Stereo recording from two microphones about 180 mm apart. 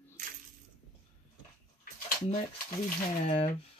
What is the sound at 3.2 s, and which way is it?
Speech, 35° left (ahead or behind).